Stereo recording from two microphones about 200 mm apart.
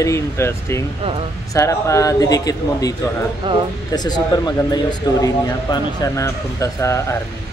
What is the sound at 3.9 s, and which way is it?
Speech, 20° left (ahead or behind).